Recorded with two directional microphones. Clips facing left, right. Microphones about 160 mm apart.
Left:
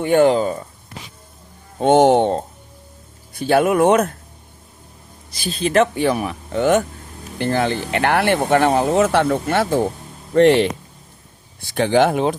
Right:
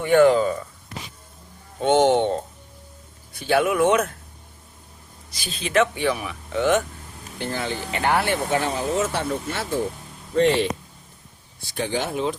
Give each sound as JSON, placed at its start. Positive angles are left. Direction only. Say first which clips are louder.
{"t": 0.0, "sound": "speech", "louder": "left 1 dB", "side_deg": 30}
{"t": 1.8, "sound": "speech", "louder": "left 5 dB", "side_deg": 45}
{"t": 3.4, "sound": "speech", "louder": "left 5 dB", "side_deg": 45}
{"t": 5.3, "sound": "speech", "louder": "left 5 dB", "side_deg": 35}
{"t": 7.3, "sound": "speech", "louder": "left 8 dB", "side_deg": 65}
{"t": 11.7, "sound": "speech", "louder": "left 10 dB", "side_deg": 80}